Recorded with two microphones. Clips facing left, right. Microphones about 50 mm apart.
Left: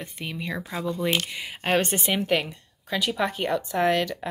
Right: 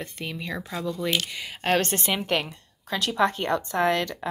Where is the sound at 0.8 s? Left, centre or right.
Left.